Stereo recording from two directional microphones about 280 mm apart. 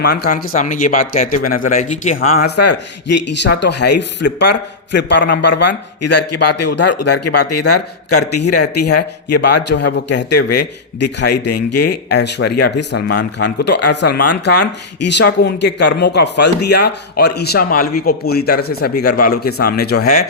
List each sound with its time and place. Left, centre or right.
0.0 s speech: left
3.4 s speech: left
6.0 s a man's voice: left
9.3 s speech: left
10.5 s a man's voice: left
12.1 s speech: left